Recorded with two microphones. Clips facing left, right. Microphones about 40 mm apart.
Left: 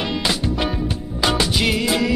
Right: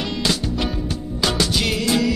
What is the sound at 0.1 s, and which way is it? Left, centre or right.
Music, centre.